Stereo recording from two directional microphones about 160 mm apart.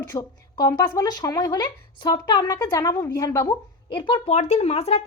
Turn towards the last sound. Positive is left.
turn(degrees=40)  # may be behind; listen again after turning